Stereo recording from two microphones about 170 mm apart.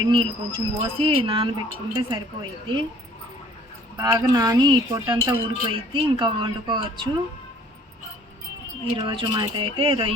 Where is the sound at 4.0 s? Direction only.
20° right (ahead or behind).